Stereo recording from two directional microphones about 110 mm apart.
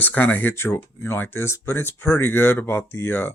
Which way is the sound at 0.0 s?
15° left (ahead or behind).